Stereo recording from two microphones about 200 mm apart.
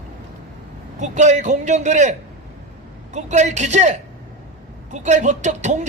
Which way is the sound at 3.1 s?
35° right (ahead or behind).